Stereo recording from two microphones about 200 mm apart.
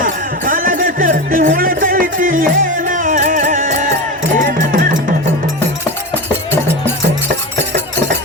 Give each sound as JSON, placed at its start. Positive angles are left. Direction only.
{"t": 0.0, "sound": "music", "side_deg": -45}